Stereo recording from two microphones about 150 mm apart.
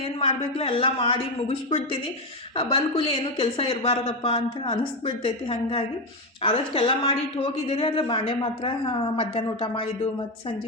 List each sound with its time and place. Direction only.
0.0 s speech: 40° left (ahead or behind)